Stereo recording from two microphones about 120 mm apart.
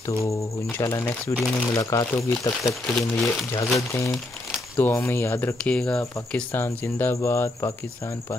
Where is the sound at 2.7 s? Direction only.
Centre (ahead or behind).